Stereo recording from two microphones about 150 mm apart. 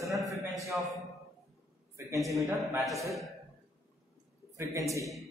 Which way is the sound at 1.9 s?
20° right (ahead or behind).